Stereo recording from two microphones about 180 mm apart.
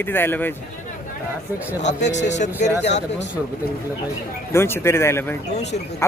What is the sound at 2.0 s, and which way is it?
Speech, 40° left (ahead or behind).